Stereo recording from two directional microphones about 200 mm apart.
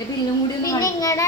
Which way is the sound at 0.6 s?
15° left (ahead or behind).